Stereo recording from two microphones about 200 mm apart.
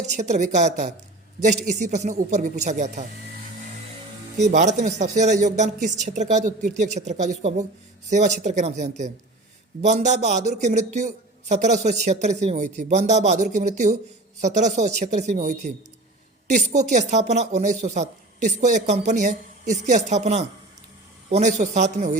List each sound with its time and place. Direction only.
0.0 s a man's voice: 35° right (ahead or behind)
4.4 s a man's voice: 35° right (ahead or behind)